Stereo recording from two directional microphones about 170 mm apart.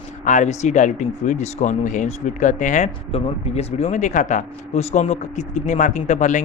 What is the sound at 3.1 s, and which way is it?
Speech, 35° left (ahead or behind).